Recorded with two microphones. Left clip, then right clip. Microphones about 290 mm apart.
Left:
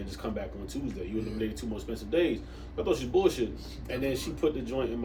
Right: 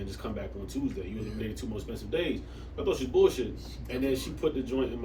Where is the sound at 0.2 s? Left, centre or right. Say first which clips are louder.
Left 4 dB; centre.